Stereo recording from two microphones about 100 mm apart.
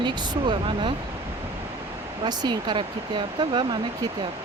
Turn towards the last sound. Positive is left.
turn(degrees=-50)  # may be behind; listen again after turning